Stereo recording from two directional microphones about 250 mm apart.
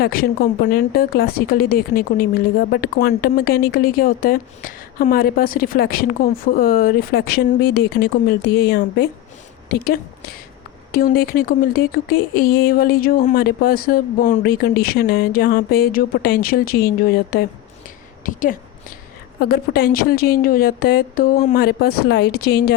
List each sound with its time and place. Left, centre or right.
0.0 s a woman's voice: left